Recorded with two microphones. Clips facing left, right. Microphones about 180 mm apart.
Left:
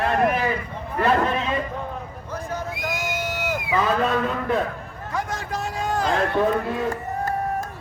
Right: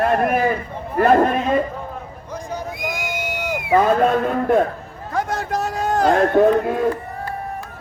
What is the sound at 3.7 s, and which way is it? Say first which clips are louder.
Speech: right 7 dB; 50° right (ahead or behind).